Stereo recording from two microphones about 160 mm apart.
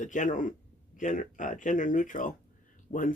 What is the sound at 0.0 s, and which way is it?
Speech, 50° left (ahead or behind).